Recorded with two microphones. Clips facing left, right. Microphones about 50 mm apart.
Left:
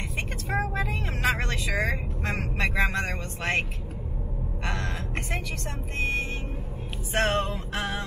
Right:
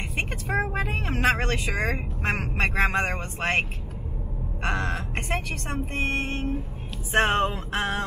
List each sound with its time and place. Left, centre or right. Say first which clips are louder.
0.5 s vehicle: right 1 dB; centre
0.7 s vehicle: right 3 dB; right
2.5 s speech: right 2 dB; right
4.6 s speech: right 5 dB; right
7.2 s speech: right 4 dB; right